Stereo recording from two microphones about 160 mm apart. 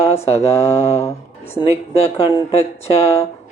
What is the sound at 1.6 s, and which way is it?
Mantra, 40° left (ahead or behind).